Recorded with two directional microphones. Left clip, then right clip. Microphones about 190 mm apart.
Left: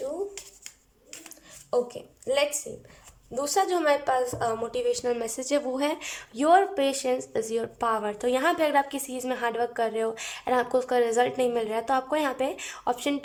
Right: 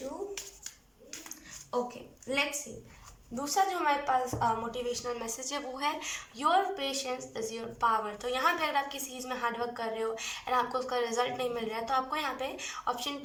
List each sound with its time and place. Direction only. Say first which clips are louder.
3.4 s a woman's voice: left 4 dB; 50° left (ahead or behind)